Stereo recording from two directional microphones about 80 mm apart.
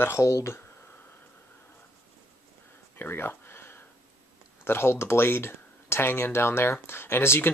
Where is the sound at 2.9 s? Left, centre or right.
Left.